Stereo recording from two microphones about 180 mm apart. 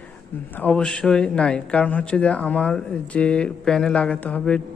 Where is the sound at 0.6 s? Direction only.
5° left (ahead or behind).